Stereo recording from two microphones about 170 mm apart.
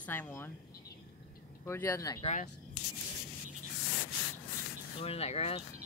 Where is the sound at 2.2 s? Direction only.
40° left (ahead or behind).